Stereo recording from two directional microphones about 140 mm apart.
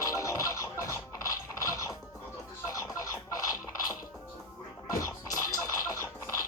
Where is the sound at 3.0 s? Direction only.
25° left (ahead or behind).